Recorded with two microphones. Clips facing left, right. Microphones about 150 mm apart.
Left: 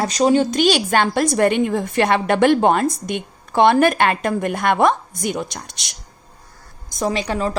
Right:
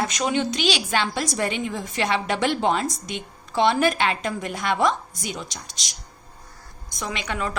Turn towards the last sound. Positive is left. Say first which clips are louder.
# left 8 dB
turn(degrees=35)  # may be behind; listen again after turning